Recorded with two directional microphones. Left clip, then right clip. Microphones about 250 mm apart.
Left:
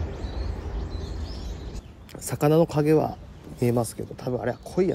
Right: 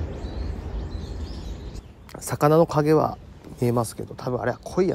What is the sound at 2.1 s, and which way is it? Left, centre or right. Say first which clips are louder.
Speech: right 3 dB; centre.